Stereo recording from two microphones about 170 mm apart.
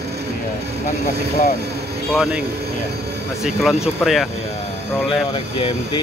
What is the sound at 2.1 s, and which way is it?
Speech, 5° right (ahead or behind).